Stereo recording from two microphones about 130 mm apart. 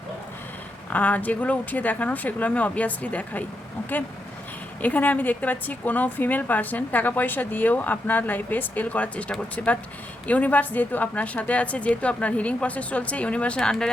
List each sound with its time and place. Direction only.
0.9 s a woman's voice: 10° left (ahead or behind)
4.8 s a woman's voice: 10° left (ahead or behind)